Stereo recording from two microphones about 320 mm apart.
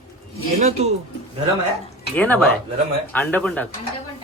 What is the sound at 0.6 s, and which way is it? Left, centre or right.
Speech, centre.